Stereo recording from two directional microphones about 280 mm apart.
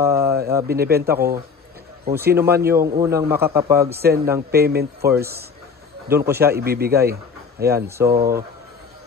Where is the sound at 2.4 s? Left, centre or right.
Centre.